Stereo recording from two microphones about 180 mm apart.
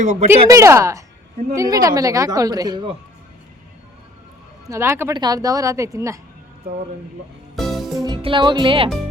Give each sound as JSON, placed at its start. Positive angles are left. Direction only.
{"t": 0.0, "sound": "speech", "side_deg": -40}
{"t": 0.4, "sound": "a woman's voice", "side_deg": -15}
{"t": 4.6, "sound": "speech", "side_deg": -15}
{"t": 7.5, "sound": "music", "side_deg": 0}
{"t": 8.0, "sound": "speech", "side_deg": -25}